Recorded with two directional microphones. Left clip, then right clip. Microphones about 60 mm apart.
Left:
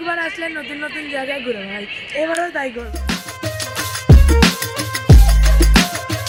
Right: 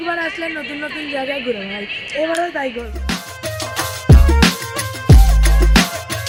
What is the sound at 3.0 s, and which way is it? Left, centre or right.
Music, centre.